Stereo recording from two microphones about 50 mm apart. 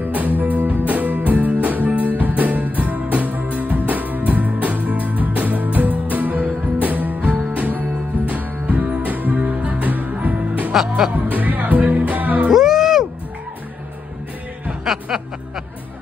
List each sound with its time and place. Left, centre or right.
0.0 s music: right
10.7 s speech: centre
11.2 s music: right
12.4 s music: centre
14.7 s a sound: centre